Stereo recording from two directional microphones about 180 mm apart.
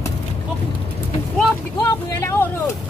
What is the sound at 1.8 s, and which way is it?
Vehicle, 15° left (ahead or behind).